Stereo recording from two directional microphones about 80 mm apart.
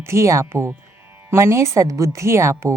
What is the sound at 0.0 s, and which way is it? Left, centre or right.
Speech, right.